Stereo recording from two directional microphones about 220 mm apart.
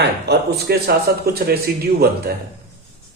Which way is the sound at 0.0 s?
45° right (ahead or behind).